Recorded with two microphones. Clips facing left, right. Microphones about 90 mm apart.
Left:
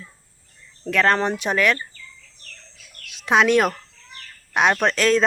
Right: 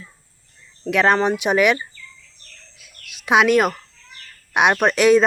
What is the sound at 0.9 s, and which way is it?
Speech, 10° right (ahead or behind).